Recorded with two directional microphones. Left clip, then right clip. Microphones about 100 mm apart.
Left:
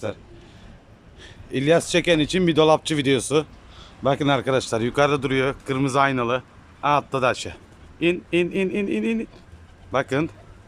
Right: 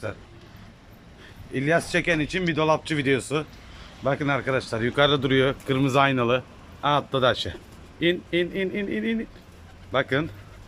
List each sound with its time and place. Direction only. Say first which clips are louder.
1.2 s a man's voice: left 4 dB; 35° left (ahead or behind)
5.0 s speech: even; 10° left (ahead or behind)